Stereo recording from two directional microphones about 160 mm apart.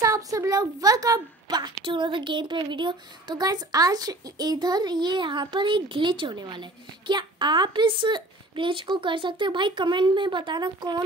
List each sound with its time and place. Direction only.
0.0 s a woman's voice: 20° right (ahead or behind)